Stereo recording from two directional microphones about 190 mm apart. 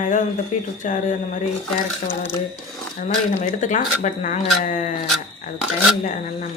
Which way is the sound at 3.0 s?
40° left (ahead or behind).